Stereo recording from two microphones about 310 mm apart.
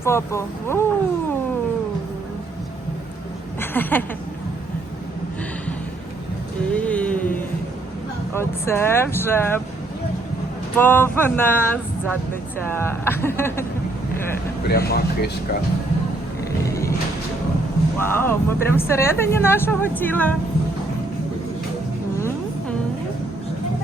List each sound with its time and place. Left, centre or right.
0.0 s a woman's voice: centre
3.6 s a sound: centre
6.7 s a sound: centre
8.3 s a woman's voice: centre
10.8 s a woman's voice: centre
14.7 s speech: left
16.6 s music: centre
17.9 s a woman's voice: centre